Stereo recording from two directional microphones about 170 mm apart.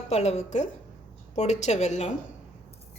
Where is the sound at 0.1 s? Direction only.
40° left (ahead or behind).